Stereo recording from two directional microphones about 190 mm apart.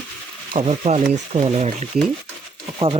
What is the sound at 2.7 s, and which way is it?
Speech, 25° right (ahead or behind).